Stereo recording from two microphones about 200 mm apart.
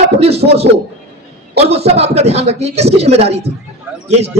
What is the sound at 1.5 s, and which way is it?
A man's voice, 30° right (ahead or behind).